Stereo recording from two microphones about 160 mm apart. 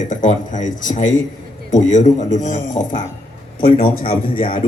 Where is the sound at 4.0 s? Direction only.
35° left (ahead or behind).